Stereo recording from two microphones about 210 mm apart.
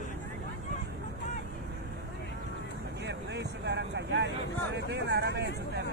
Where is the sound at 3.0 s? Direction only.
55° right (ahead or behind).